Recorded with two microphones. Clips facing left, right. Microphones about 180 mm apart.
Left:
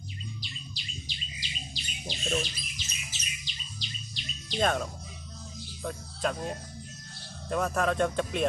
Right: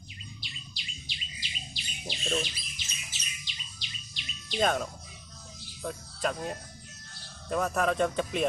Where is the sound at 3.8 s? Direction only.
40° left (ahead or behind).